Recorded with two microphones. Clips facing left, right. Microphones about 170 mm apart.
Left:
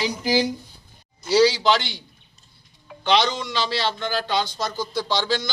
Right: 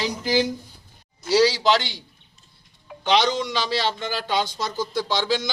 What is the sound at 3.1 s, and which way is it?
Speech, 10° right (ahead or behind).